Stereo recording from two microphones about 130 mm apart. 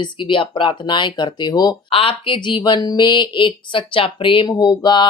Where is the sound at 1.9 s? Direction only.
45° left (ahead or behind).